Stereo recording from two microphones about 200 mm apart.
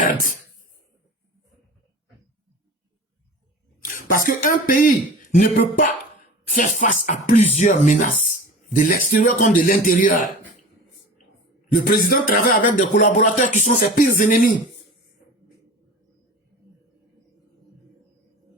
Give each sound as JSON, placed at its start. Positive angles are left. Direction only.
{"t": 3.8, "sound": "speech", "side_deg": 45}
{"t": 11.9, "sound": "speech", "side_deg": 45}